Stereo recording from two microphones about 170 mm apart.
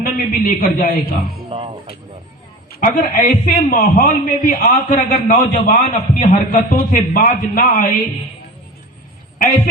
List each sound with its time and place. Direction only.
0.0 s a man's voice: 55° left (ahead or behind)
1.5 s music: 30° right (ahead or behind)
2.8 s a man's voice: 55° left (ahead or behind)